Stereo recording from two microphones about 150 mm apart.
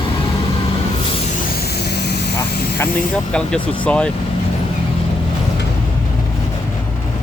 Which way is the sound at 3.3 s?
5° left (ahead or behind).